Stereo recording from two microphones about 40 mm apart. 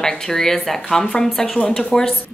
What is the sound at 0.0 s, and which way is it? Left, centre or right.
Speech, centre.